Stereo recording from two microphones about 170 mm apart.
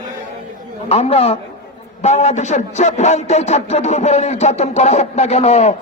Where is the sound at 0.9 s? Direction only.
35° left (ahead or behind).